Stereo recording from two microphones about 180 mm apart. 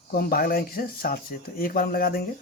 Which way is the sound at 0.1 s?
55° left (ahead or behind).